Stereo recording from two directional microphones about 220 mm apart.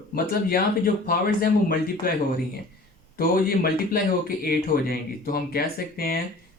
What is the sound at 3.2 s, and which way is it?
Speech, 40° left (ahead or behind).